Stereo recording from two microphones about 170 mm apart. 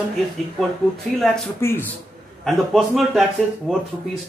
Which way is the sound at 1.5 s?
15° left (ahead or behind).